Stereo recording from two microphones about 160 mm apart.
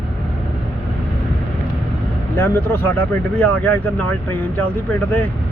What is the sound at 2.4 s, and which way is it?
Speech, 15° left (ahead or behind).